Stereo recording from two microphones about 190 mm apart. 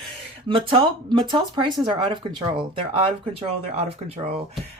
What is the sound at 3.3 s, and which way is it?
Speech, 30° right (ahead or behind).